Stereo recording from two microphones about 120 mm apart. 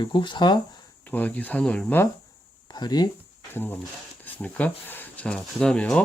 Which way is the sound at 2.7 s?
35° left (ahead or behind).